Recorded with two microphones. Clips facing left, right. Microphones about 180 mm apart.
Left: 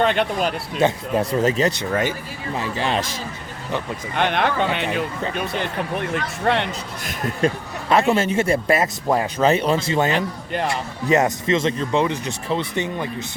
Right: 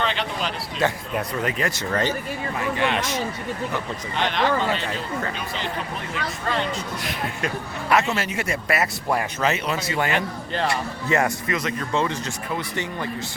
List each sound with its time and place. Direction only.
0.0 s speech: 50° left (ahead or behind)
0.8 s speech: 25° left (ahead or behind)
1.8 s speech: 10° left (ahead or behind)
2.6 s speech: 30° left (ahead or behind)
4.1 s speech: 55° left (ahead or behind)
7.2 s speech: 40° left (ahead or behind)
8.1 s speech: 25° left (ahead or behind)